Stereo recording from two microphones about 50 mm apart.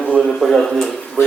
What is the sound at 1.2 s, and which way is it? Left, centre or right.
Speech, left.